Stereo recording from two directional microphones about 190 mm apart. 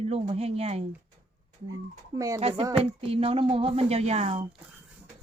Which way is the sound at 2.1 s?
15° right (ahead or behind).